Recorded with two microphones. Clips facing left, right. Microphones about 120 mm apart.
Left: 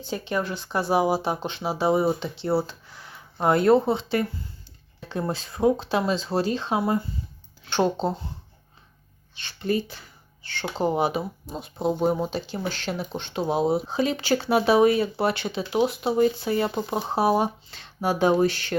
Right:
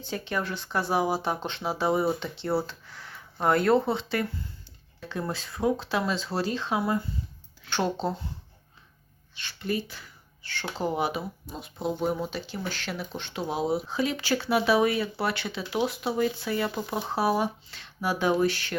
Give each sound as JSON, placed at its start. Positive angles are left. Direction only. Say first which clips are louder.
{"t": 0.0, "sound": "speech", "louder": "left 3 dB", "side_deg": 15}
{"t": 9.4, "sound": "speech", "louder": "left 5 dB", "side_deg": 25}